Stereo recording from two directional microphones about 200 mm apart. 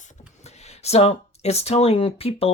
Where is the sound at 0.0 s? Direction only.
35° left (ahead or behind).